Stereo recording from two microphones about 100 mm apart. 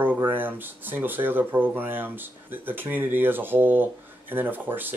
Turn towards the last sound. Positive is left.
turn(degrees=-20)  # may be behind; listen again after turning